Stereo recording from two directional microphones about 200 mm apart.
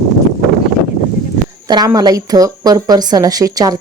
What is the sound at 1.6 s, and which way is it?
A woman's voice, 20° right (ahead or behind).